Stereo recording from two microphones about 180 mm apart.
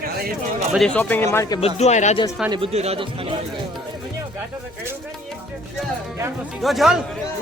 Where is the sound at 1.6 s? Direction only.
40° left (ahead or behind).